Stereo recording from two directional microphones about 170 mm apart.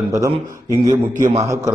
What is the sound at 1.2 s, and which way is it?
Speech, 40° right (ahead or behind).